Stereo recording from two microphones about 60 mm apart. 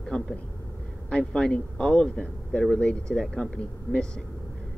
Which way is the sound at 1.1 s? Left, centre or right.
Centre.